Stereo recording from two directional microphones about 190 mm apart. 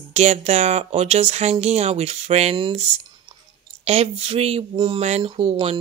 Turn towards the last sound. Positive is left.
turn(degrees=-30)  # may be behind; listen again after turning